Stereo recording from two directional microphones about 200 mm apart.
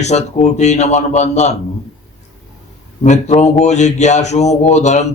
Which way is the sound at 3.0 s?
35° left (ahead or behind).